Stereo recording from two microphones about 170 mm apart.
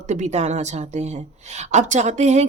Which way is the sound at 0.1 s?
40° right (ahead or behind).